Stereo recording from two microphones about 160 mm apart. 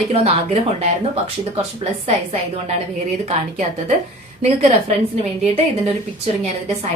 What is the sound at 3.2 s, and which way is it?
A woman's voice, 45° right (ahead or behind).